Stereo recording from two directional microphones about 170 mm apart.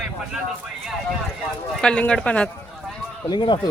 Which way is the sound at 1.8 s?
5° left (ahead or behind).